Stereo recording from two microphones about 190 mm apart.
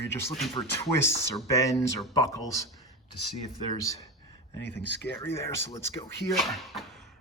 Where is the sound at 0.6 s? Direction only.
25° left (ahead or behind).